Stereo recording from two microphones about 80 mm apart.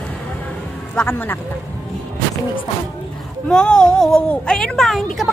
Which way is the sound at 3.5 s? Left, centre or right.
Centre.